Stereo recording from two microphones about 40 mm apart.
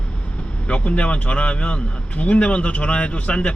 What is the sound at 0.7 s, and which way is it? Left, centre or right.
Speech, left.